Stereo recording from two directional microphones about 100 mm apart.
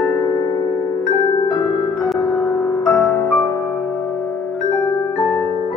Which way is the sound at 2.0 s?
5° left (ahead or behind).